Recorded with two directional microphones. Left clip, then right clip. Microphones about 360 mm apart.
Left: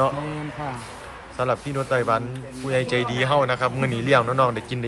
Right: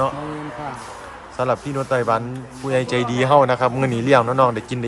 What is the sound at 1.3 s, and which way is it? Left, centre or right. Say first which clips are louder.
A man's voice: right 3 dB; centre.